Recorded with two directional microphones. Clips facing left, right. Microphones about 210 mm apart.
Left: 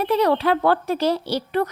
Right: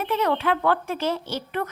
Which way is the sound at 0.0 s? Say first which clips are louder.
Left 5 dB; 35° left (ahead or behind).